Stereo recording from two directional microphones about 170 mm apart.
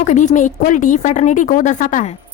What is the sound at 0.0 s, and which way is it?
A woman's voice, 45° left (ahead or behind).